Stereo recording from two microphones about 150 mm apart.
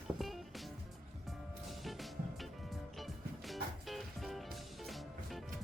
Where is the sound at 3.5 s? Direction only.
Centre (ahead or behind).